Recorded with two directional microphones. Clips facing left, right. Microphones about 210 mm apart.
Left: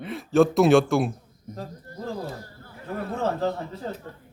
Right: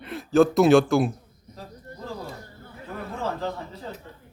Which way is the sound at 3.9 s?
40° left (ahead or behind).